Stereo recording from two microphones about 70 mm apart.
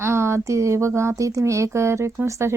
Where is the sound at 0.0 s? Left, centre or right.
Right.